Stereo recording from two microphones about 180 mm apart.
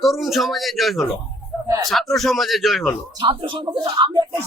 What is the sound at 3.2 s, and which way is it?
Speech, 25° right (ahead or behind).